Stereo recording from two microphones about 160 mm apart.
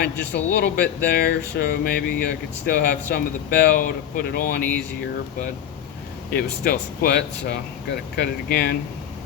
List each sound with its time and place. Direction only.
0.0 s speech: 90° left; by 4.6 s 70° left (ahead or behind)
6.3 s speech: 75° left (ahead or behind)